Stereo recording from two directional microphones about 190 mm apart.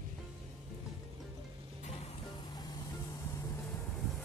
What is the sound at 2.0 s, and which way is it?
Music, 35° left (ahead or behind).